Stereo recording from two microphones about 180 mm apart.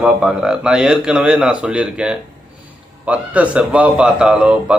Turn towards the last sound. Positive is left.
turn(degrees=-5)  # may be behind; listen again after turning